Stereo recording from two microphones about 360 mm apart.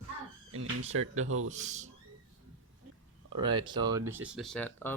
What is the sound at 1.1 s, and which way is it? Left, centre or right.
Speech, right.